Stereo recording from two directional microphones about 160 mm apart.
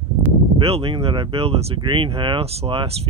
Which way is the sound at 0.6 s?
35° right (ahead or behind).